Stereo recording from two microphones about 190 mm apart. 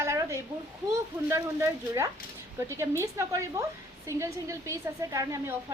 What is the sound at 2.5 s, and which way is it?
A woman's voice, 15° right (ahead or behind).